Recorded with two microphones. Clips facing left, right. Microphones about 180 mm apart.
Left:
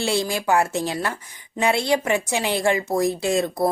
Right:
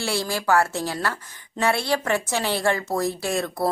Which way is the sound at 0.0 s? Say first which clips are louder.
Left 3 dB; 20° left (ahead or behind).